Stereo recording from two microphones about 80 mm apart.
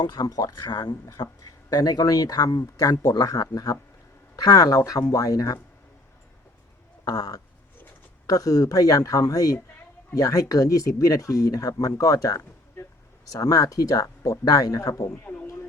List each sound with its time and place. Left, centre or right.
0.0 s speech: left
0.7 s speech: left
7.0 s a sound: left
8.3 s speech: left